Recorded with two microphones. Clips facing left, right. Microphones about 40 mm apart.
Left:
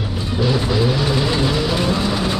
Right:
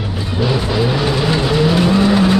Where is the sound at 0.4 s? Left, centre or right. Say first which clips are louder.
Right 1 dB; centre.